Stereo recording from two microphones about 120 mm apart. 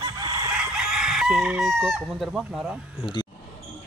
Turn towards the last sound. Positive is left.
turn(degrees=-5)  # may be behind; listen again after turning